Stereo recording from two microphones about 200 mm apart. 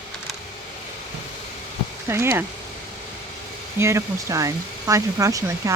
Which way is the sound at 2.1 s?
10° right (ahead or behind).